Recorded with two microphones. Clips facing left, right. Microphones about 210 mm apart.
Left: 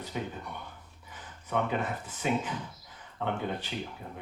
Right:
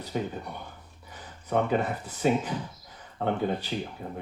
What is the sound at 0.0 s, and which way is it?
Speech, 35° right (ahead or behind).